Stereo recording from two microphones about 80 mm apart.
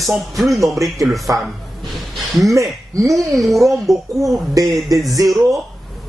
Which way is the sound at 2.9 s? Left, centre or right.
Right.